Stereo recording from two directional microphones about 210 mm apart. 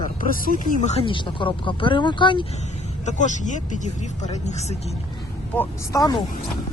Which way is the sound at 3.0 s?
35° left (ahead or behind).